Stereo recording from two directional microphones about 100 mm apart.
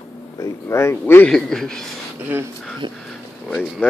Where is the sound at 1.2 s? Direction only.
5° left (ahead or behind).